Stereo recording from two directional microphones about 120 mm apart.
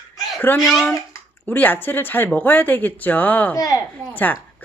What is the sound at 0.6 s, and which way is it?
Speech, centre (ahead or behind).